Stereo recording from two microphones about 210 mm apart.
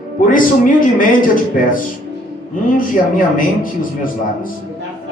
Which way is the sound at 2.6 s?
40° left (ahead or behind).